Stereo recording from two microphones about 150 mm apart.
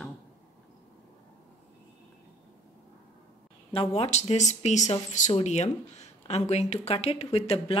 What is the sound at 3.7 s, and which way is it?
A woman's voice, 40° left (ahead or behind).